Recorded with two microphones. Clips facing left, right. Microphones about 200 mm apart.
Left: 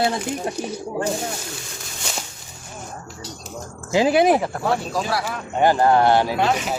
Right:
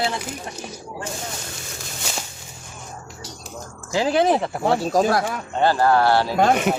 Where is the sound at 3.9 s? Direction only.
15° left (ahead or behind).